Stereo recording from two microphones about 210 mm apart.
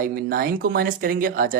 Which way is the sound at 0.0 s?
45° right (ahead or behind).